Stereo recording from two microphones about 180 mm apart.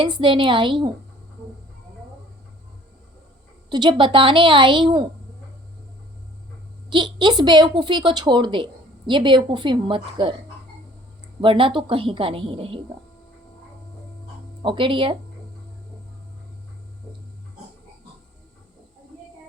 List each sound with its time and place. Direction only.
0.0 s a woman's voice: 25° right (ahead or behind)
3.7 s a woman's voice: 25° right (ahead or behind)
6.9 s a woman's voice: 25° right (ahead or behind)
11.3 s a woman's voice: 30° right (ahead or behind)
14.6 s a woman's voice: 30° right (ahead or behind)